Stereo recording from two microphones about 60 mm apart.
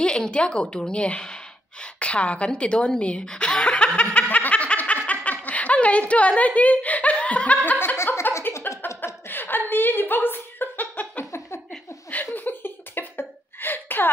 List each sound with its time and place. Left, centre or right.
0.0 s a woman's voice: centre
3.0 s chuckle: centre
4.4 s snicker: left
7.8 s chuckle: left
9.3 s a sound: left
12.4 s cough: left